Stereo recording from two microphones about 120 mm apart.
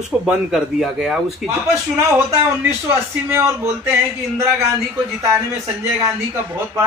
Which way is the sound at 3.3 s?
20° right (ahead or behind).